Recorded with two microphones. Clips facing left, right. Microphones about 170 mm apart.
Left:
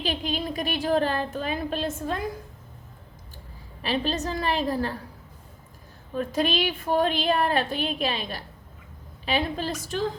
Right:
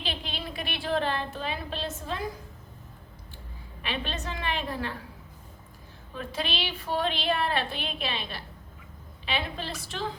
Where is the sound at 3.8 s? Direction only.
35° left (ahead or behind).